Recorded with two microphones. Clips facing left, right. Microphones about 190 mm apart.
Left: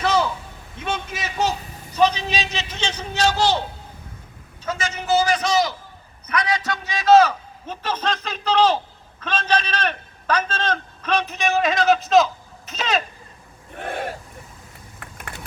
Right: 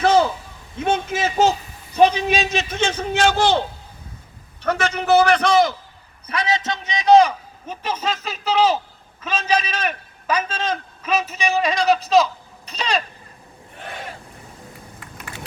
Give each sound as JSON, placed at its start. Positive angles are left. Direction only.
{"t": 0.0, "sound": "a sound", "side_deg": -50}
{"t": 0.8, "sound": "a man's voice", "side_deg": -50}
{"t": 4.6, "sound": "a man's voice", "side_deg": -60}
{"t": 6.2, "sound": "a man's voice", "side_deg": -25}
{"t": 13.7, "sound": "owl", "side_deg": 55}